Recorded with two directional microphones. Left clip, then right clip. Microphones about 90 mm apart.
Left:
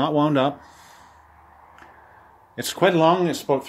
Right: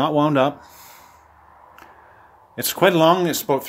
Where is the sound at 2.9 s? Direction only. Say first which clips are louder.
Right 2 dB; 80° right.